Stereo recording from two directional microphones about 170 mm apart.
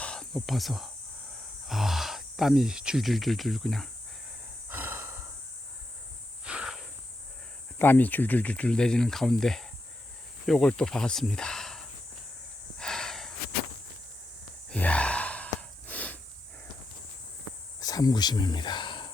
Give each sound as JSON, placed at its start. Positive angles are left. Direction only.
{"t": 0.0, "sound": "a sound", "side_deg": 5}
{"t": 1.6, "sound": "speech", "side_deg": 0}
{"t": 4.7, "sound": "snort", "side_deg": -10}
{"t": 6.4, "sound": "a sound", "side_deg": -5}
{"t": 7.8, "sound": "speech", "side_deg": 10}
{"t": 12.8, "sound": "snort", "side_deg": 5}
{"t": 14.7, "sound": "gasp", "side_deg": 5}
{"t": 15.9, "sound": "a sound", "side_deg": 10}
{"t": 17.7, "sound": "speech", "side_deg": 20}